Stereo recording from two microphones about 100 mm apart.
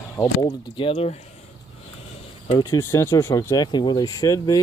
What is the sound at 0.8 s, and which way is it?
Speech, 80° left.